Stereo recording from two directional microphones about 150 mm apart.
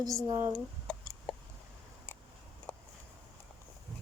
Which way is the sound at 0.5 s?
5° left (ahead or behind).